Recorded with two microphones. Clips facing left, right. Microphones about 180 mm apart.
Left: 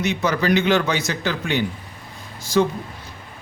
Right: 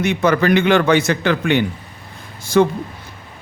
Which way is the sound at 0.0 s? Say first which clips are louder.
Right 5 dB; 55° right (ahead or behind).